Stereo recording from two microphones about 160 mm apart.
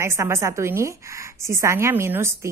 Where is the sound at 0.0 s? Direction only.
15° right (ahead or behind).